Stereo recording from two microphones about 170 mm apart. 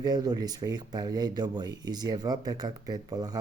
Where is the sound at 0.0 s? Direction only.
20° right (ahead or behind).